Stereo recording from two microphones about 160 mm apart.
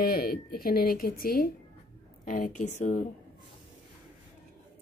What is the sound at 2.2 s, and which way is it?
Speech, 55° left (ahead or behind).